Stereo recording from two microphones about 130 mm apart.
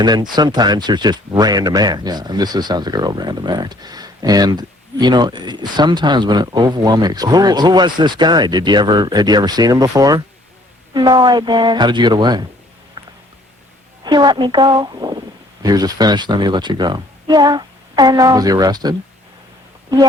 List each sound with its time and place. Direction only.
0.0 s speech: 35° right (ahead or behind)
14.0 s speech: 35° right (ahead or behind)